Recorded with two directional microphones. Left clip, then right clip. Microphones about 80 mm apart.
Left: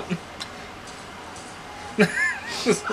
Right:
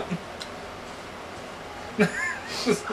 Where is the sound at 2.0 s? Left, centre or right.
Left.